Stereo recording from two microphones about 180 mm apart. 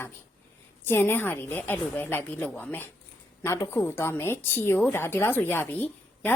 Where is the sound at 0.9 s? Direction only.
10° left (ahead or behind).